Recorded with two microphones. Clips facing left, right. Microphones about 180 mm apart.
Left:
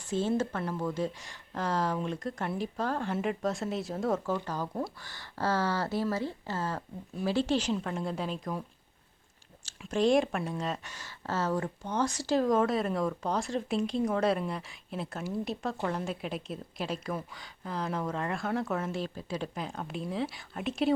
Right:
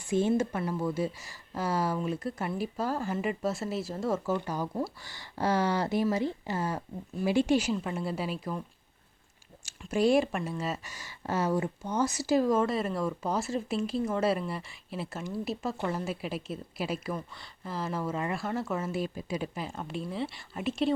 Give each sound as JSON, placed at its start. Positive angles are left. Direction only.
{"t": 0.0, "sound": "speech", "side_deg": -15}
{"t": 9.8, "sound": "speech", "side_deg": -5}